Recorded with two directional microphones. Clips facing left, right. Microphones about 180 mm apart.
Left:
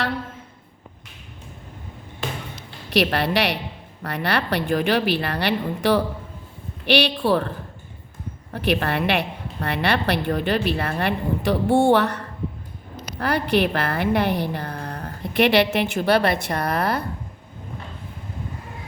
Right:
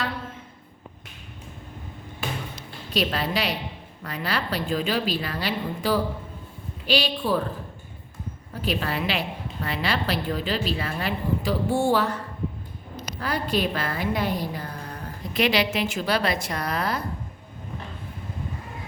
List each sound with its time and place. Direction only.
2.9 s a woman's voice: 70° left (ahead or behind)
8.5 s a woman's voice: 65° left (ahead or behind)